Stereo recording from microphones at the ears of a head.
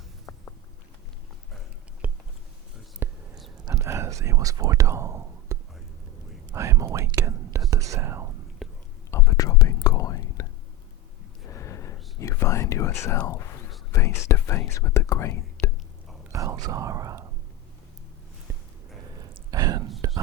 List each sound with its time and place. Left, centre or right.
3.7 s whispering: right
6.5 s speech: right
9.0 s whispering: left
16.3 s speech: right
19.0 s a sound: right